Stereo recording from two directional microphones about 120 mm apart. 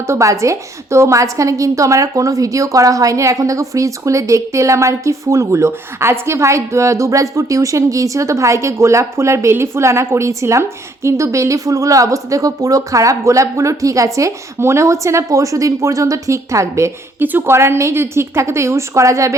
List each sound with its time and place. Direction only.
0.1 s a woman's voice: 25° right (ahead or behind)